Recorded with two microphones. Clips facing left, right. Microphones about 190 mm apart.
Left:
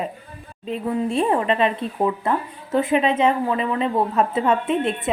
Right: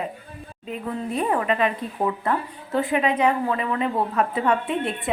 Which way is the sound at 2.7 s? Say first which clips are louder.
Left 3 dB; 20° left (ahead or behind).